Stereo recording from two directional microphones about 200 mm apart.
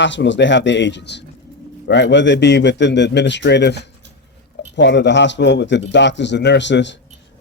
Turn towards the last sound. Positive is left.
turn(degrees=60)  # may be behind; listen again after turning